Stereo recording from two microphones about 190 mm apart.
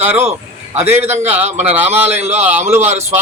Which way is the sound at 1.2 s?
10° right (ahead or behind).